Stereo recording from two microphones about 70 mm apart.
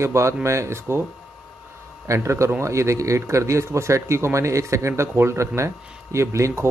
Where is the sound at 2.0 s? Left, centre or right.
Right.